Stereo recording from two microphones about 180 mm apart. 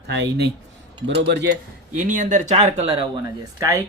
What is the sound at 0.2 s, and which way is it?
Speech, 70° right (ahead or behind).